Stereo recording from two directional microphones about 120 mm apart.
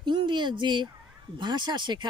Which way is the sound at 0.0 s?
40° right (ahead or behind).